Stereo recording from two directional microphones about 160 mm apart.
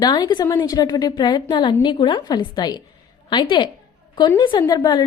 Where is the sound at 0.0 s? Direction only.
25° left (ahead or behind).